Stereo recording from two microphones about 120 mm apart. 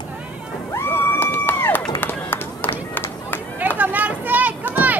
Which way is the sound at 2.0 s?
15° left (ahead or behind).